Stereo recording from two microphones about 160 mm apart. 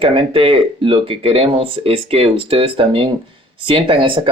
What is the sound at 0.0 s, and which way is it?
Speech, 35° right (ahead or behind).